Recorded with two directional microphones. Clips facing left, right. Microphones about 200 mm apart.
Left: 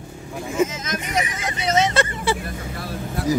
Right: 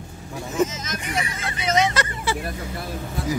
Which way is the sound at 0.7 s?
55° left (ahead or behind).